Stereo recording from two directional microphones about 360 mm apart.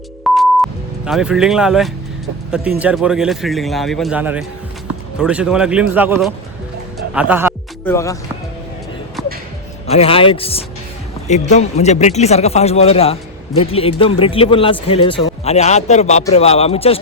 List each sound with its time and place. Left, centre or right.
0.3 s music: centre
2.5 s a man's voice: centre
7.9 s speech: centre
9.8 s speech: centre